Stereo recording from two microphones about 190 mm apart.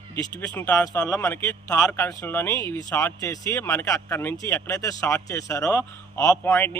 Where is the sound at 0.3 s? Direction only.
10° left (ahead or behind).